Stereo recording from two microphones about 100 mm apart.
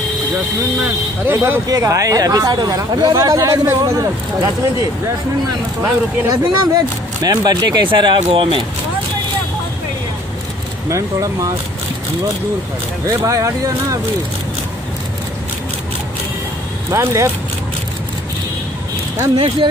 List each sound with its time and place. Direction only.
1.2 s speech: 20° right (ahead or behind)
1.7 s speech: 35° right (ahead or behind)
5.8 s speech: 35° right (ahead or behind); by 8.6 s 65° right (ahead or behind)
10.9 s speech: 30° right (ahead or behind)
13.0 s speech: 30° right (ahead or behind)
16.9 s speech: 30° right (ahead or behind)
19.3 s speech: 75° right (ahead or behind)